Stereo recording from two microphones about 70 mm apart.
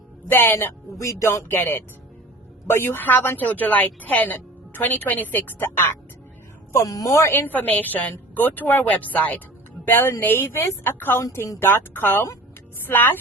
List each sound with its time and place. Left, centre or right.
0.3 s speech: left
0.9 s speech: left
1.5 s a woman's voice: left
6.8 s a woman's voice: left
7.1 s a woman's voice: left
11.2 s a woman's voice: left